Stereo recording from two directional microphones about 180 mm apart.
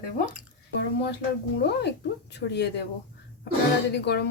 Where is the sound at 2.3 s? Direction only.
70° left (ahead or behind).